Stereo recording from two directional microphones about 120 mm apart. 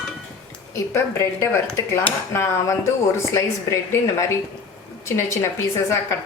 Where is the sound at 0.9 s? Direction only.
25° left (ahead or behind).